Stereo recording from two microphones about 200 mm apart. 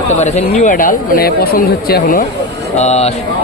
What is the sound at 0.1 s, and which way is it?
Speech, 35° left (ahead or behind).